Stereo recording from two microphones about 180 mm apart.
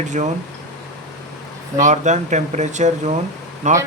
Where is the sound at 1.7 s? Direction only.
40° right (ahead or behind).